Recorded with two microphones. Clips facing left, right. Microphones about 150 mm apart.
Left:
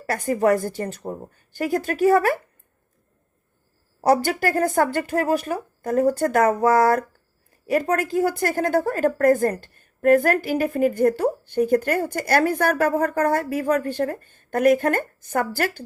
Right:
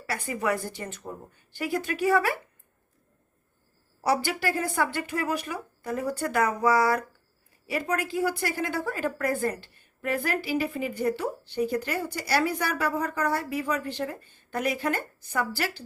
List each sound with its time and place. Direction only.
0.0 s a woman's voice: 40° left (ahead or behind)
4.0 s a woman's voice: 40° left (ahead or behind)